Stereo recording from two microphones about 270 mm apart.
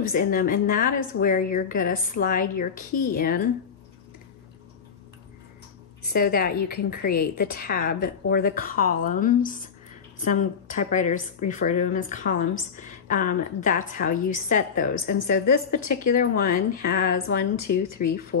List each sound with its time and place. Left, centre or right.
0.0 s a woman's voice: left
6.0 s a woman's voice: left